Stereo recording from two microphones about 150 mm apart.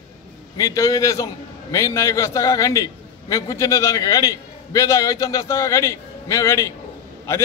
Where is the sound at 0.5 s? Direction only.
20° left (ahead or behind).